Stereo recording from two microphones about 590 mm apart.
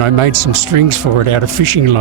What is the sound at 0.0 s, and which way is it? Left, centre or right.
Speech, right.